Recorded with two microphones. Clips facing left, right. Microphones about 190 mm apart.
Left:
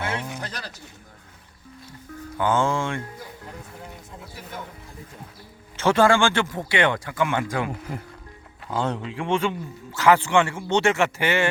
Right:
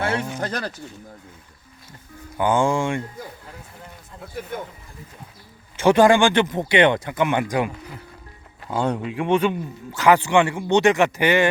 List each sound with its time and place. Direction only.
0.3 s speech: 50° right (ahead or behind)
2.4 s speech: 15° right (ahead or behind)
4.4 s speech: 55° right (ahead or behind)
5.7 s speech: 15° right (ahead or behind)
8.7 s speech: 15° right (ahead or behind)